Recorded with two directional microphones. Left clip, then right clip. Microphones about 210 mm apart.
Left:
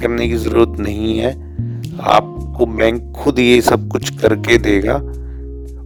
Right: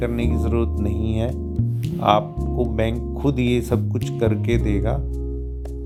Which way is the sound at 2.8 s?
50° left (ahead or behind).